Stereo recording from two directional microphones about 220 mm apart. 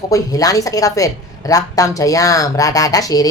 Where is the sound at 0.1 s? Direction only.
15° left (ahead or behind).